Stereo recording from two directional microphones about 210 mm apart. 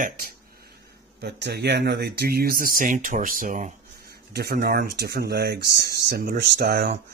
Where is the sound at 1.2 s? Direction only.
55° right (ahead or behind).